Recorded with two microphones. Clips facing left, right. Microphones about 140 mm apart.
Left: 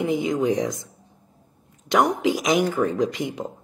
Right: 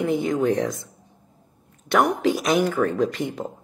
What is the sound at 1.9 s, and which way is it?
Speech, 15° left (ahead or behind).